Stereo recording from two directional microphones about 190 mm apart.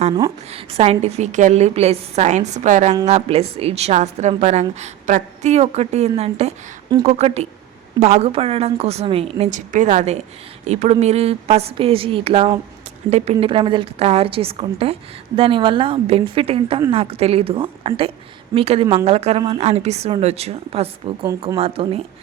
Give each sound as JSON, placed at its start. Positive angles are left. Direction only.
{"t": 0.5, "sound": "a woman's voice", "side_deg": -30}